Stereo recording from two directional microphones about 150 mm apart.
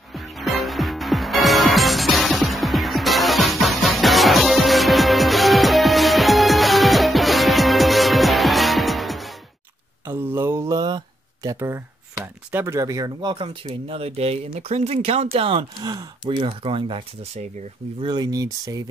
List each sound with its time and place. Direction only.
0.1 s music: centre (ahead or behind)
10.0 s a sound: 15° right (ahead or behind)
11.4 s speech: 20° right (ahead or behind); by 17.4 s 40° right (ahead or behind)
18.0 s speech: 30° right (ahead or behind)